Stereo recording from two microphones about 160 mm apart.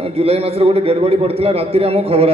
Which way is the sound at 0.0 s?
40° right (ahead or behind).